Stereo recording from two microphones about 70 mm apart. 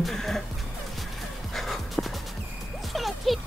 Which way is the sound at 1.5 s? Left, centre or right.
Centre.